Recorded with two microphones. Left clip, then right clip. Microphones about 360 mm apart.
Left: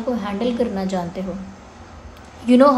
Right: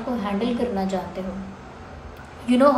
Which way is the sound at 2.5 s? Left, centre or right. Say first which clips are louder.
Left 4 dB; left.